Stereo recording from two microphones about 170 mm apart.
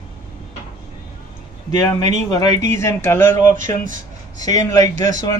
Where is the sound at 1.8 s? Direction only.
20° left (ahead or behind).